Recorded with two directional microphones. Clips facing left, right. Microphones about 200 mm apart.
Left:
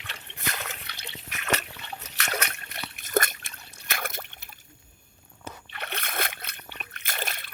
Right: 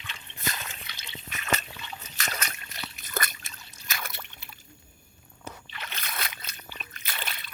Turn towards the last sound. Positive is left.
turn(degrees=50)  # may be behind; listen again after turning